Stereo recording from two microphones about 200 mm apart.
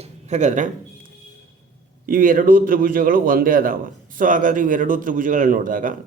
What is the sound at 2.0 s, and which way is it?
A man's voice, 45° right (ahead or behind).